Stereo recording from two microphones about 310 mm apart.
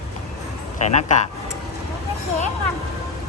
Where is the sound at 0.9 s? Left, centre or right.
Left.